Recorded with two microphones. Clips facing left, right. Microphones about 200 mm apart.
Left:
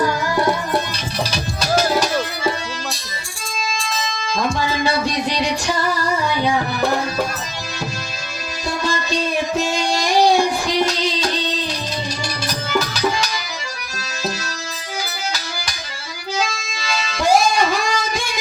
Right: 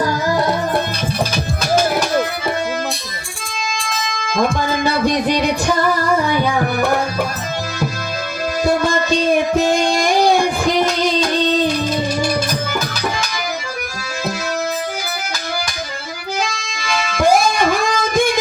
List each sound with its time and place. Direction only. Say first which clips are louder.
3.8 s music: right 1 dB; 55° right (ahead or behind)
8.6 s child singing: right 6 dB; 55° right (ahead or behind)
16.9 s music: right 2 dB; 55° right (ahead or behind)